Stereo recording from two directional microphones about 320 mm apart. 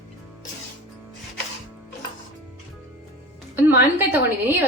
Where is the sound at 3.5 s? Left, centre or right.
Centre.